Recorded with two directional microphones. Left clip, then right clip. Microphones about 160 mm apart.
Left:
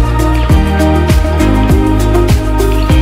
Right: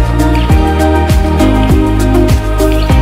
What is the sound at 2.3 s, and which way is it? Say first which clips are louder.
Music: right 1 dB; centre (ahead or behind).